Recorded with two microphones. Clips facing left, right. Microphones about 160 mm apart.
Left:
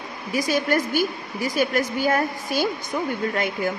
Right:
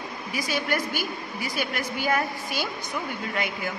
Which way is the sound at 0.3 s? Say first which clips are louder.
Left 6 dB; 45° left (ahead or behind).